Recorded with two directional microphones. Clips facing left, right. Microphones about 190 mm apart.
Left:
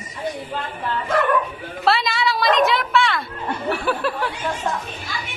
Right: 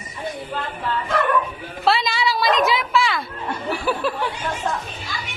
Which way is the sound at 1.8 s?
Centre (ahead or behind).